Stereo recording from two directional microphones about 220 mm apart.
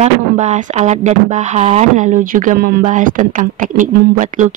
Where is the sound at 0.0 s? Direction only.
30° right (ahead or behind).